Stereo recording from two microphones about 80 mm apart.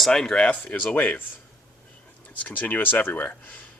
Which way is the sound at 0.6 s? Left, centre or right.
Left.